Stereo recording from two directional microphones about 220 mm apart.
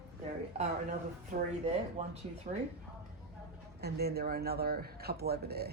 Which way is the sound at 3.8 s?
45° right (ahead or behind).